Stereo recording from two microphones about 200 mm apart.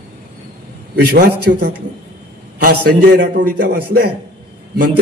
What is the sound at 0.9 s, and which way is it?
A man's voice, 50° right (ahead or behind).